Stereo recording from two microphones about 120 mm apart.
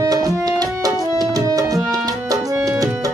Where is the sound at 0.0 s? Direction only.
30° right (ahead or behind).